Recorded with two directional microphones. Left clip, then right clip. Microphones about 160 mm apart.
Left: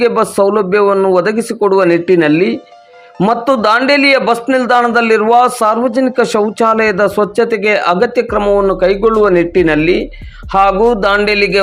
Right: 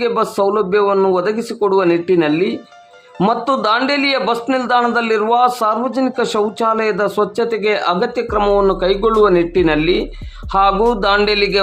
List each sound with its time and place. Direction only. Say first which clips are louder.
0.0 s a man's voice: left 5 dB; 20° left (ahead or behind)
8.4 s speech: left 2 dB; 5° left (ahead or behind)